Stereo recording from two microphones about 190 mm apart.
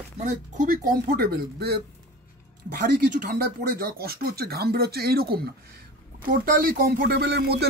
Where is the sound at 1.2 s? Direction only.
55° right (ahead or behind).